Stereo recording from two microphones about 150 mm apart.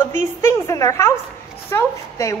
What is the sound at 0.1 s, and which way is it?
A woman's voice, 15° left (ahead or behind).